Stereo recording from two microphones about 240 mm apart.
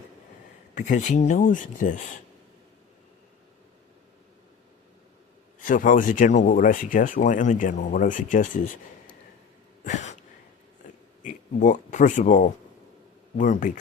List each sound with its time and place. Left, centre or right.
0.8 s speech: left
5.5 s speech: left
9.8 s a sound: left
11.2 s speech: left